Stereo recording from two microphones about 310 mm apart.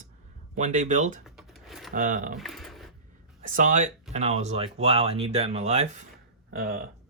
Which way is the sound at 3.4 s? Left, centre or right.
Right.